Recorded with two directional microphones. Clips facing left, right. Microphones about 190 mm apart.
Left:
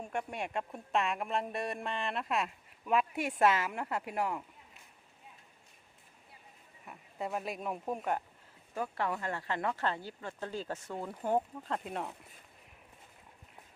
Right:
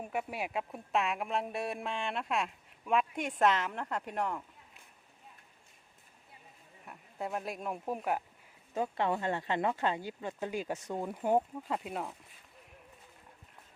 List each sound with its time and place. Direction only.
0.0 s speech: 5° right (ahead or behind)
6.8 s speech: centre (ahead or behind)
8.7 s speech: 20° right (ahead or behind); by 12.1 s 5° right (ahead or behind)